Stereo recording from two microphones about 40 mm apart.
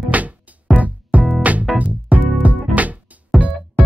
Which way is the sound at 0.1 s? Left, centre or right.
Right.